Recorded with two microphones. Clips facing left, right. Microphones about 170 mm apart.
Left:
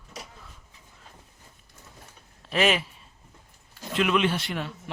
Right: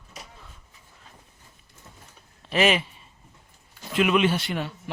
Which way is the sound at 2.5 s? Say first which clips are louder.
Right 2 dB; centre (ahead or behind).